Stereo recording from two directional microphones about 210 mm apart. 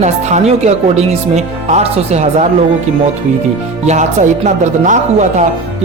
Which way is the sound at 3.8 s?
35° right (ahead or behind).